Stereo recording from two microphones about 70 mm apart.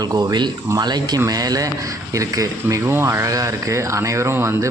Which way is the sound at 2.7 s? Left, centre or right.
Right.